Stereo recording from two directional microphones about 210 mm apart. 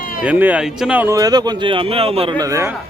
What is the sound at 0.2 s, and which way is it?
Speech, 5° right (ahead or behind).